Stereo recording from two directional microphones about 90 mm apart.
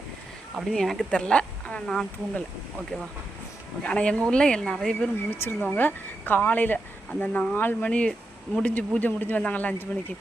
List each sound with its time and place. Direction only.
0.5 s speech: centre (ahead or behind)
3.8 s speech: 10° left (ahead or behind)
5.1 s speech: 25° left (ahead or behind)
7.9 s speech: 10° left (ahead or behind)